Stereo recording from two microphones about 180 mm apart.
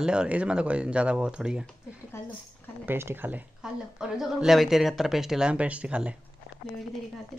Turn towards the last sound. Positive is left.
turn(degrees=-5)  # may be behind; listen again after turning